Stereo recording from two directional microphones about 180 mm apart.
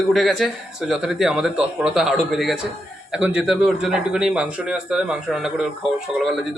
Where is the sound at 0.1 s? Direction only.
Centre (ahead or behind).